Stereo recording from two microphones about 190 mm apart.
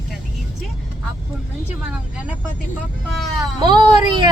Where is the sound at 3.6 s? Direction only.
25° right (ahead or behind).